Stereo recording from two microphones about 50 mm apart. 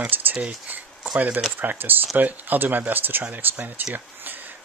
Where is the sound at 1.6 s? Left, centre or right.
Right.